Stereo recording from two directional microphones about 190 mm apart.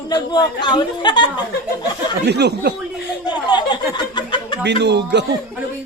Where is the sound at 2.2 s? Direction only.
60° right (ahead or behind).